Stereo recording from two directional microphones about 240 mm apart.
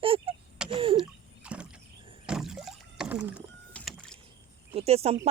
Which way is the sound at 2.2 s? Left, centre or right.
Centre.